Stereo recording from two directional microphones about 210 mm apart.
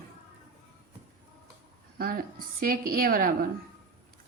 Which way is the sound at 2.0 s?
45° right (ahead or behind).